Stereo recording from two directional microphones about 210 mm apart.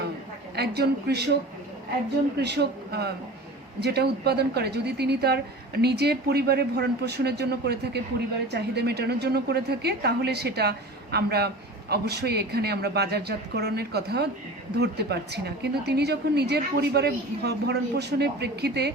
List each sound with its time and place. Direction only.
0.5 s a woman's voice: 50° right (ahead or behind)
2.4 s a woman's voice: 50° right (ahead or behind)